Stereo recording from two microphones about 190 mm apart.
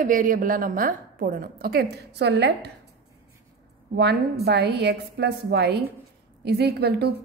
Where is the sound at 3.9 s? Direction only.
60° right (ahead or behind).